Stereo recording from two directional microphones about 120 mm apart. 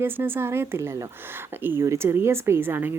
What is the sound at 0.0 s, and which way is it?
A woman's voice, 20° right (ahead or behind).